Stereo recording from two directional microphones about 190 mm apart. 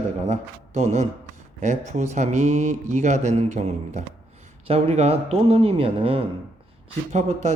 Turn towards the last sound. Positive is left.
turn(degrees=-40)  # may be behind; listen again after turning